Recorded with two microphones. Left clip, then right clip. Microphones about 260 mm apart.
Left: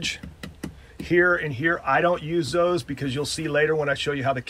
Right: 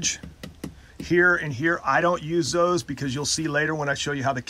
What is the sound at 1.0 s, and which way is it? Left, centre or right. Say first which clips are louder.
Speech: even; centre.